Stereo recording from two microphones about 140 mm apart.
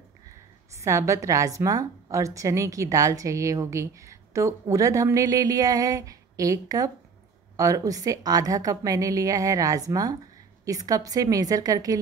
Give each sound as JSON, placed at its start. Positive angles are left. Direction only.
{"t": 0.7, "sound": "a woman's voice", "side_deg": -20}